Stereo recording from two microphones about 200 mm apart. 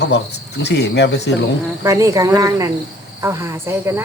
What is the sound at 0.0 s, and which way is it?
Speech, 55° left (ahead or behind).